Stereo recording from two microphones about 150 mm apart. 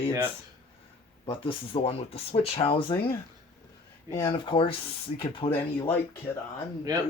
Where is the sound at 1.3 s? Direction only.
35° left (ahead or behind).